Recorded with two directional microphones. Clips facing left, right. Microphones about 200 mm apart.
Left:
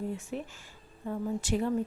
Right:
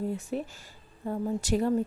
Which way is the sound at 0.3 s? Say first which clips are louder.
Right 4 dB; 40° right (ahead or behind).